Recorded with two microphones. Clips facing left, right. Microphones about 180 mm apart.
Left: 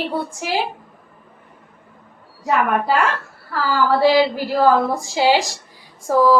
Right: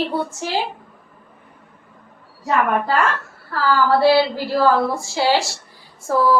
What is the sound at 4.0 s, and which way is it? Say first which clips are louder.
A woman's voice: even; 15° left (ahead or behind).